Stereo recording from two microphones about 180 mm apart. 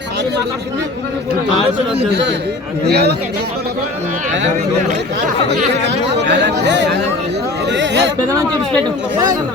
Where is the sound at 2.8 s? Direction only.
65° right (ahead or behind).